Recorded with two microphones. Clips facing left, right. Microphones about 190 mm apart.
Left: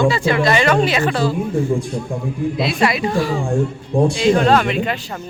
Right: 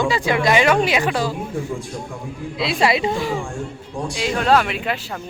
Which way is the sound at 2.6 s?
25° right (ahead or behind).